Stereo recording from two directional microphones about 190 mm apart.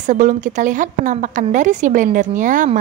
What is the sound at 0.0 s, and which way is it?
A woman's voice, 40° right (ahead or behind).